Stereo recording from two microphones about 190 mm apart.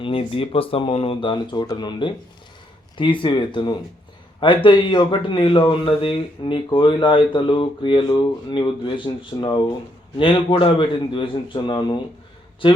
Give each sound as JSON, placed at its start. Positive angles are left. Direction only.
{"t": 0.0, "sound": "speech", "side_deg": 30}